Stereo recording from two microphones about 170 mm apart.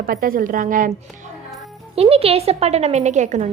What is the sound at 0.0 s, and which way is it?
Speech, 60° right (ahead or behind).